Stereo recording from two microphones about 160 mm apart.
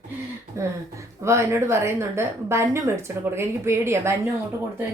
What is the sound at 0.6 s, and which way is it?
A woman's voice, 15° right (ahead or behind).